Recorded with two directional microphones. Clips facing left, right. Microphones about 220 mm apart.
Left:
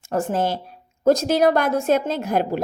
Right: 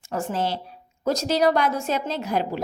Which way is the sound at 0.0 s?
50° left (ahead or behind).